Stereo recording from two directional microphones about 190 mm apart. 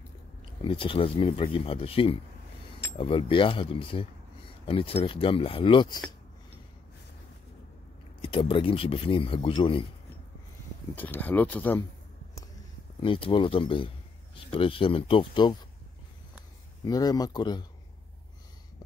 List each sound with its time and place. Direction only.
0.6 s speech: 25° left (ahead or behind)
8.2 s speech: 25° left (ahead or behind)
11.0 s speech: 10° left (ahead or behind)
13.0 s speech: 25° left (ahead or behind)
16.8 s speech: 20° left (ahead or behind)